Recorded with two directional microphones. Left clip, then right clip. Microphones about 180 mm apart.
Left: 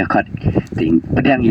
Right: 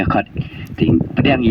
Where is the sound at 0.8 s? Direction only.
30° left (ahead or behind).